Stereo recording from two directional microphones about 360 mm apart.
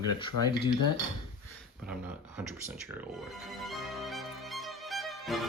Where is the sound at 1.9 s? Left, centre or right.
Centre.